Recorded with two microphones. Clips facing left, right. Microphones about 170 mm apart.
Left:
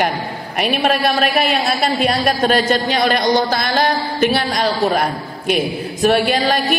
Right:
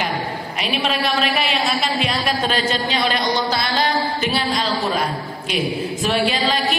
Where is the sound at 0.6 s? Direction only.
50° left (ahead or behind).